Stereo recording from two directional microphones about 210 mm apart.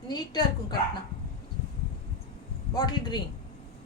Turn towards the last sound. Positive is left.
turn(degrees=20)  # may be behind; listen again after turning